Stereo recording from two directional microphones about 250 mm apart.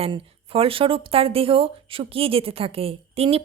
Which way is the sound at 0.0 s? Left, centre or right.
Right.